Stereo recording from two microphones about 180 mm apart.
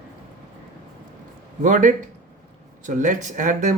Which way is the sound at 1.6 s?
45° right (ahead or behind).